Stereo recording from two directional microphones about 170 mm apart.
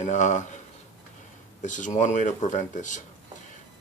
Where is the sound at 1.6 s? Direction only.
45° left (ahead or behind).